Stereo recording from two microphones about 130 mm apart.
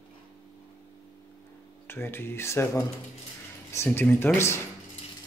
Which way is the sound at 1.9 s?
20° left (ahead or behind).